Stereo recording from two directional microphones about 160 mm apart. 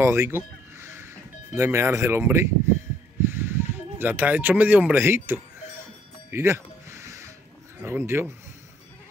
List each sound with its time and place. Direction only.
0.0 s speech: 15° right (ahead or behind)
6.3 s a sound: 15° right (ahead or behind)
7.8 s speech: 15° right (ahead or behind)